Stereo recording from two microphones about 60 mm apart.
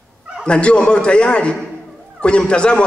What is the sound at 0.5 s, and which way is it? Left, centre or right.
A man's voice, centre.